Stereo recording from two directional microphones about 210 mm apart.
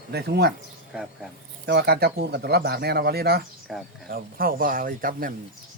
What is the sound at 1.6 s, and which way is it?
Speech, 50° right (ahead or behind).